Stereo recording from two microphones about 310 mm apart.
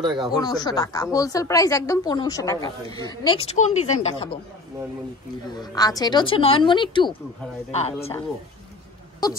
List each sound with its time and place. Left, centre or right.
0.3 s a woman's voice: centre
5.5 s a woman's voice: centre